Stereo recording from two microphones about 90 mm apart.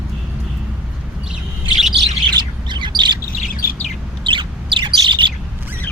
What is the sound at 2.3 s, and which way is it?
Bird, 55° right (ahead or behind).